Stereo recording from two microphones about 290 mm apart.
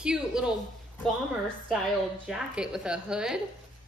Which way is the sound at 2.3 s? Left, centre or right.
Centre.